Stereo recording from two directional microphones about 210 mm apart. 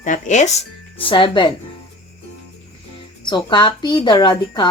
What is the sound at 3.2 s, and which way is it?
Speech, 20° left (ahead or behind).